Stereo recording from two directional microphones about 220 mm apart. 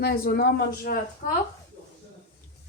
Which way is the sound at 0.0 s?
45° left (ahead or behind).